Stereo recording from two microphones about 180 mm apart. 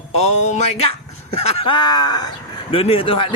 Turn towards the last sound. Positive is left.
turn(degrees=30)  # may be behind; listen again after turning